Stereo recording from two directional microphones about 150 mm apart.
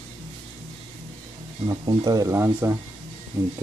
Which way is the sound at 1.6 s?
30° right (ahead or behind).